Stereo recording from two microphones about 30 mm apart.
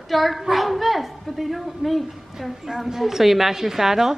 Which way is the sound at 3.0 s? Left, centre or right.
Centre.